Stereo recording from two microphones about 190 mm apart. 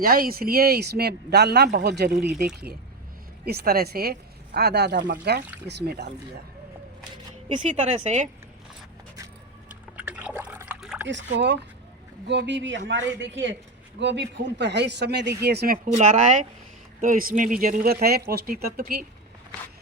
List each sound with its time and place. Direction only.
0.0 s speech: 50° right (ahead or behind)
3.4 s speech: 55° right (ahead or behind)
7.4 s a woman's voice: 40° right (ahead or behind)
10.0 s liquid: 5° right (ahead or behind)
10.8 s dog: 5° right (ahead or behind)
11.1 s a man's voice: 65° right (ahead or behind)
16.0 s a woman's voice: 40° right (ahead or behind)